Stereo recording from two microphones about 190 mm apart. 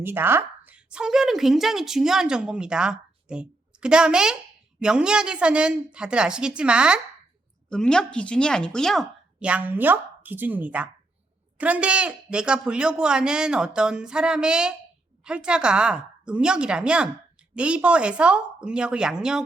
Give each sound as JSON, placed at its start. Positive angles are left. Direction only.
{"t": 0.0, "sound": "speech", "side_deg": -10}